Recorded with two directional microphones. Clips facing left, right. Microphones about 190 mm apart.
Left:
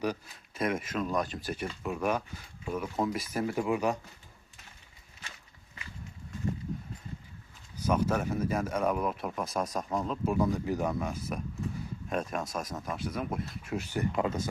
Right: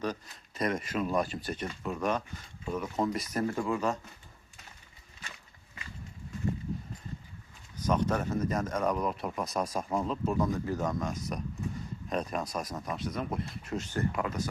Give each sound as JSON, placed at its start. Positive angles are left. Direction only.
{"t": 0.0, "sound": "speech", "side_deg": 5}
{"t": 7.9, "sound": "speech", "side_deg": 5}
{"t": 10.2, "sound": "speech", "side_deg": 10}
{"t": 14.2, "sound": "speech", "side_deg": 25}